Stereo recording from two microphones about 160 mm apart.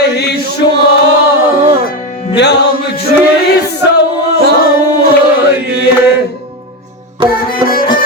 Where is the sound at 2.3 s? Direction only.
90° left.